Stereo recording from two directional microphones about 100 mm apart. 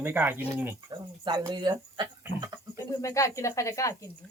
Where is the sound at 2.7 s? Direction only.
35° left (ahead or behind).